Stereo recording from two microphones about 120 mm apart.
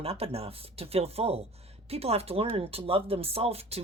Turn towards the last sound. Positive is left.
turn(degrees=-55)  # may be behind; listen again after turning